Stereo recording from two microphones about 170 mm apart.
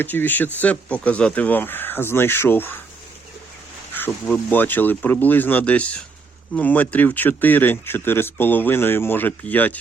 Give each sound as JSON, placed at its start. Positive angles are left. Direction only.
{"t": 0.0, "sound": "speech", "side_deg": 10}
{"t": 3.9, "sound": "speech", "side_deg": 10}